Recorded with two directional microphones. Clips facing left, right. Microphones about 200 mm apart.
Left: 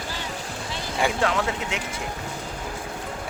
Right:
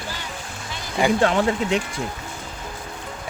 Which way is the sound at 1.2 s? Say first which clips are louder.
Right 5 dB; 30° right (ahead or behind).